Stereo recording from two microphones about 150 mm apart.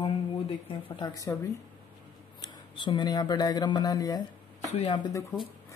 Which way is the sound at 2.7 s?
30° left (ahead or behind).